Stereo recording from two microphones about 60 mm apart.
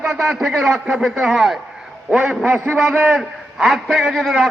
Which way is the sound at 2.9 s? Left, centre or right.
Right.